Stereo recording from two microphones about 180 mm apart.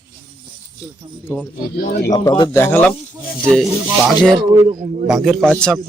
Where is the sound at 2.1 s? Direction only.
20° left (ahead or behind); by 3.7 s 5° left (ahead or behind).